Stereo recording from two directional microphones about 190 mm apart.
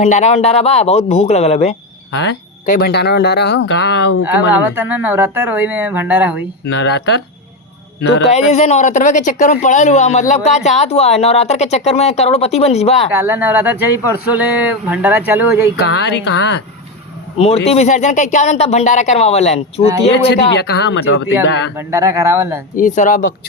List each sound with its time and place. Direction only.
0.0 s speech: 35° left (ahead or behind)
2.1 s speech: 65° left (ahead or behind)
2.6 s speech: 55° left (ahead or behind)
4.6 s speech: 10° right (ahead or behind)
6.7 s speech: 65° left (ahead or behind)
8.3 s speech: 35° left (ahead or behind)
13.1 s speech: 10° right (ahead or behind)
15.8 s speech: 65° left (ahead or behind)
17.3 s speech: 30° left (ahead or behind)
20.1 s speech: 65° left (ahead or behind)
21.8 s speech: 15° right (ahead or behind)
22.7 s speech: 45° left (ahead or behind)